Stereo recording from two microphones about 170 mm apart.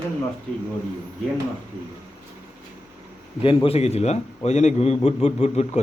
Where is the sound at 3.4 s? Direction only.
35° left (ahead or behind).